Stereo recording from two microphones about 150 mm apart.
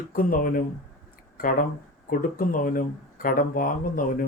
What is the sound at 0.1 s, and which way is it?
Speech, 75° left (ahead or behind).